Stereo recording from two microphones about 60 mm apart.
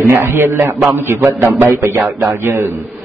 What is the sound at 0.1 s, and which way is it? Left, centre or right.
Speech, right.